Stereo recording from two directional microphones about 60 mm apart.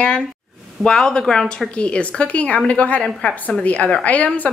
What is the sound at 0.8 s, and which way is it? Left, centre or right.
A woman's voice, centre.